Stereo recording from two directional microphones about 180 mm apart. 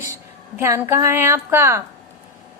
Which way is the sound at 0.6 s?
15° right (ahead or behind).